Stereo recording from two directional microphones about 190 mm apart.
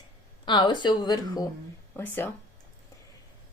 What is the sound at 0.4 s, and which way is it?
Speech, 25° left (ahead or behind).